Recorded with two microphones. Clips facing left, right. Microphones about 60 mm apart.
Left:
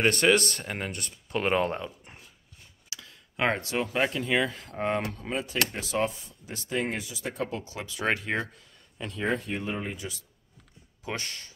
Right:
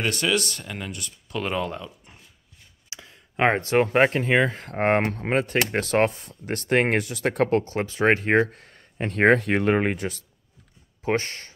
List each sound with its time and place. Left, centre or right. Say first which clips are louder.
0.0 s speech: left 2 dB; left
2.9 s speech: right 2 dB; right
4.6 s speech: right 7 dB; right
11.0 s speech: right 10 dB; right